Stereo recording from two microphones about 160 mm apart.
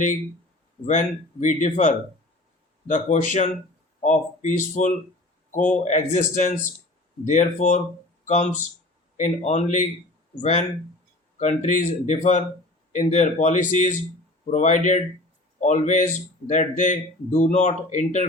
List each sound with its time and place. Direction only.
0.9 s speech: 50° left (ahead or behind)